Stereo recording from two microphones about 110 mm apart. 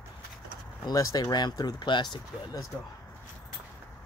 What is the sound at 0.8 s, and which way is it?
Speech, 35° left (ahead or behind).